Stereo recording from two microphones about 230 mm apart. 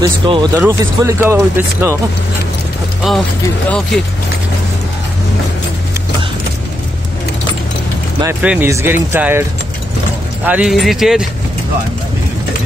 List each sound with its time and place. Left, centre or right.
0.0 s speech: centre
3.1 s speech: centre
8.2 s speech: centre
10.4 s speech: centre